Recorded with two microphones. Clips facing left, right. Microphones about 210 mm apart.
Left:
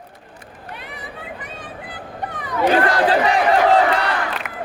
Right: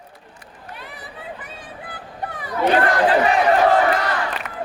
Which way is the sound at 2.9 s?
35° left (ahead or behind).